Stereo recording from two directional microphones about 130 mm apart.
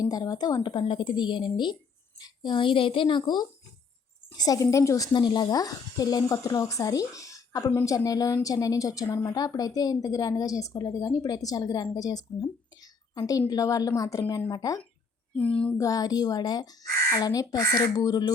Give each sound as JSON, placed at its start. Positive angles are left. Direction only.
{"t": 0.0, "sound": "a woman's voice", "side_deg": 30}
{"t": 15.4, "sound": "child singing", "side_deg": 10}
{"t": 15.8, "sound": "speech", "side_deg": 30}